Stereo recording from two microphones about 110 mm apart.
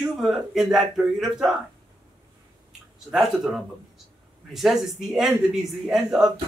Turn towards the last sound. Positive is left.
turn(degrees=-5)  # may be behind; listen again after turning